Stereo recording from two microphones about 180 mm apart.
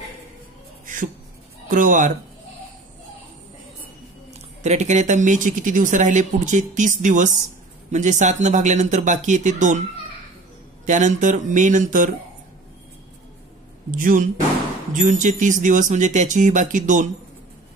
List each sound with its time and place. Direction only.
0.8 s a sound: 45° right (ahead or behind)
1.7 s speech: 45° right (ahead or behind)
4.6 s speech: 40° right (ahead or behind)
10.9 s speech: 45° right (ahead or behind)
13.8 s speech: 50° right (ahead or behind)